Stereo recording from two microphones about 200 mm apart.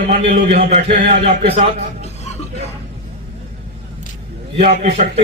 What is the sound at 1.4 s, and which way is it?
Speech, 30° right (ahead or behind).